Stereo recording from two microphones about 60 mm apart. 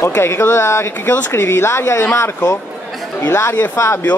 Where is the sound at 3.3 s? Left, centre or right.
Left.